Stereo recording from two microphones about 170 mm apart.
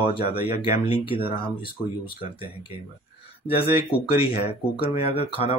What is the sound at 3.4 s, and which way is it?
Speech, 35° left (ahead or behind).